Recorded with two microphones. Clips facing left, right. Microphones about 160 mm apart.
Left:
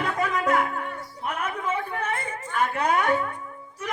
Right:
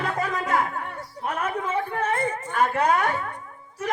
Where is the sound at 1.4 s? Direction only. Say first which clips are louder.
Right 2 dB; 40° right (ahead or behind).